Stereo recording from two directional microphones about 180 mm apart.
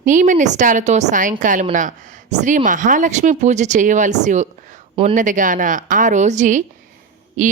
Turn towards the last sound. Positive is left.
turn(degrees=-45)  # may be behind; listen again after turning